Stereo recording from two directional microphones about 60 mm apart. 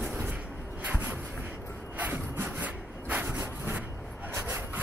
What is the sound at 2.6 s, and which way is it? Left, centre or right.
Rub, right.